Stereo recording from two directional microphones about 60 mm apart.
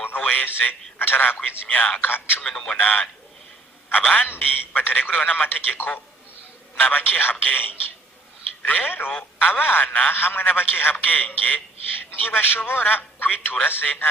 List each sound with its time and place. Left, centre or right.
0.0 s a sound: left
0.3 s a man's voice: left
1.4 s a man's voice: left
2.4 s a man's voice: centre
2.7 s a man's voice: left
4.3 s a man's voice: left